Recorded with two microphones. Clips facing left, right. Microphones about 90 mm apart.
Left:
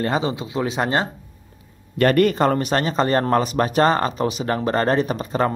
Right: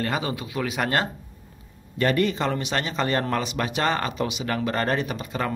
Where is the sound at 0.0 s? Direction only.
25° left (ahead or behind).